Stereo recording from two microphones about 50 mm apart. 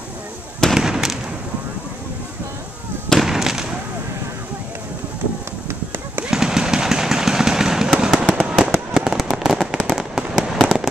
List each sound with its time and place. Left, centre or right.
0.7 s fireworks: centre
3.2 s fireworks: centre
6.2 s vehicle: centre
8.2 s fireworks: centre
9.8 s fireworks: centre
10.1 s fireworks: centre
10.6 s fireworks: centre